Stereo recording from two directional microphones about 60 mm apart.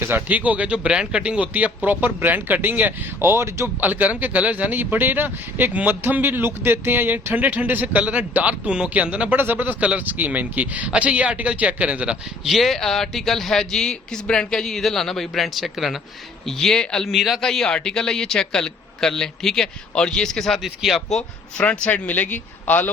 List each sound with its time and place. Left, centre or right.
0.1 s speech: right
3.8 s speech: right
9.3 s speech: right
12.5 s a man's voice: centre
17.1 s speech: centre
17.4 s a man's voice: centre; by 22.9 s left